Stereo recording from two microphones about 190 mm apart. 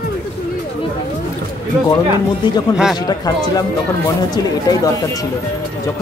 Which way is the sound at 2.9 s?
20° left (ahead or behind).